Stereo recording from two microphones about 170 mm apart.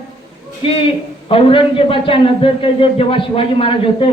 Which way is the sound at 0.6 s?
35° left (ahead or behind).